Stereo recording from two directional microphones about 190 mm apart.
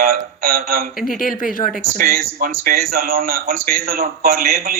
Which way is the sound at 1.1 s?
45° left (ahead or behind).